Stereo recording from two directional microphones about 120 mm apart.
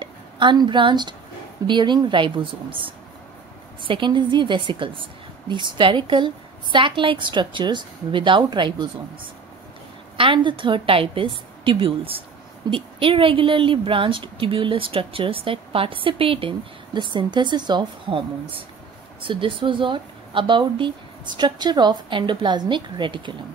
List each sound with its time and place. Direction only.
0.0 s a woman's voice: 40° right (ahead or behind)
10.1 s a woman's voice: 45° right (ahead or behind)
19.2 s speech: 45° right (ahead or behind)